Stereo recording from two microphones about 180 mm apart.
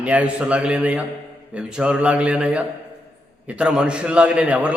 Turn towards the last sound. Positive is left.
turn(degrees=-5)  # may be behind; listen again after turning